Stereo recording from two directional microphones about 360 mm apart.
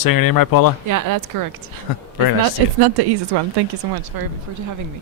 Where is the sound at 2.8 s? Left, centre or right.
Right.